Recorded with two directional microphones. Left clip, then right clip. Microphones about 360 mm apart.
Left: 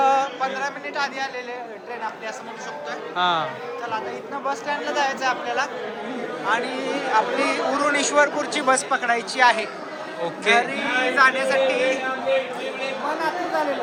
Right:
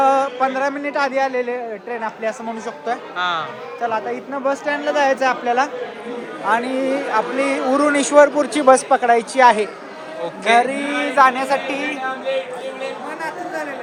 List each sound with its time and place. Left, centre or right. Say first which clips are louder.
0.0 s a sound: right 3 dB; centre
0.4 s speech: right 6 dB; centre
3.2 s speech: left 2 dB; centre
4.4 s speech: right 6 dB; centre
10.7 s speech: right 1 dB; centre